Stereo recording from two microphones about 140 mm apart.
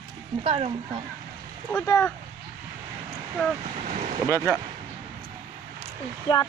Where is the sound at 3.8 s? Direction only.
60° right (ahead or behind).